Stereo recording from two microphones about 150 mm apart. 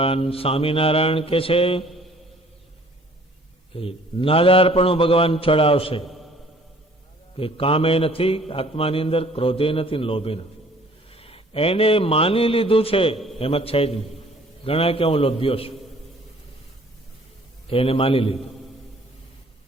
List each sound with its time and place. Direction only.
0.0 s a man's voice: 40° left (ahead or behind)
3.8 s a man's voice: 40° left (ahead or behind)
7.3 s a man's voice: 40° left (ahead or behind)
11.1 s a sound: 40° left (ahead or behind)
13.4 s a man's voice: 40° left (ahead or behind)
17.7 s a man's voice: 40° left (ahead or behind)